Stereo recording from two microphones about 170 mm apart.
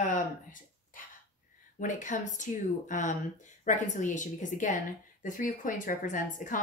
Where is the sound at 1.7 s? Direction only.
50° left (ahead or behind).